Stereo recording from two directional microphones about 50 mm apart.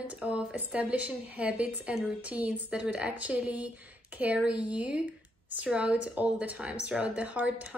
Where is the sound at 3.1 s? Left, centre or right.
Right.